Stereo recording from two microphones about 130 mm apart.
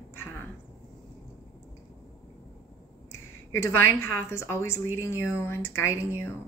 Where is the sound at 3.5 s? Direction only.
20° left (ahead or behind).